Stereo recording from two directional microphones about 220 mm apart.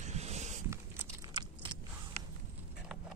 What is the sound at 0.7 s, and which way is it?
Biting, 10° right (ahead or behind).